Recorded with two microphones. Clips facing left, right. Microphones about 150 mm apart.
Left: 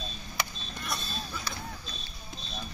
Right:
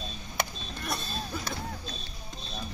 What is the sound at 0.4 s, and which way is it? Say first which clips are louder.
Vehicle: right 3 dB; 50° right (ahead or behind).